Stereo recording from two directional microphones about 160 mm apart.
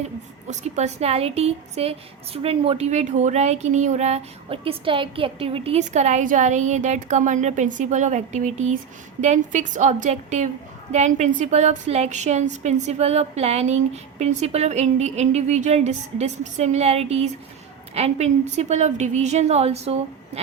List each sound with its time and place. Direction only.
0.4 s a woman's voice: 45° right (ahead or behind)